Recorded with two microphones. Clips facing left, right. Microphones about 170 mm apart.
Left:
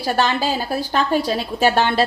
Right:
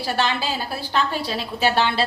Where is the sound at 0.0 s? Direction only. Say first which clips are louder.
Left 4 dB; 45° left (ahead or behind).